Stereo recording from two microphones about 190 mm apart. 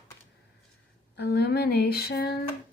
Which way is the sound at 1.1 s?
60° left (ahead or behind).